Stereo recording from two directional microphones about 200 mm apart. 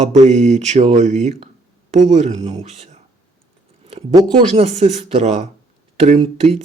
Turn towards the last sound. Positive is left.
turn(degrees=-30)  # may be behind; listen again after turning